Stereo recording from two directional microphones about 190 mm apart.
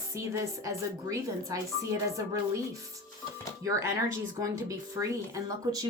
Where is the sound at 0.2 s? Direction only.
15° right (ahead or behind).